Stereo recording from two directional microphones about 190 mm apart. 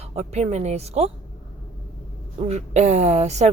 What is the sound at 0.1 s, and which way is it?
A woman's voice, 35° right (ahead or behind).